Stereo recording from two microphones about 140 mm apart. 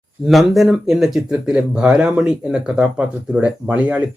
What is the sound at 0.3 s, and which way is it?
Speech, centre (ahead or behind).